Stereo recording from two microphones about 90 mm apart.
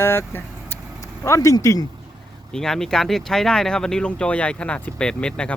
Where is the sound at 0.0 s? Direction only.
25° left (ahead or behind).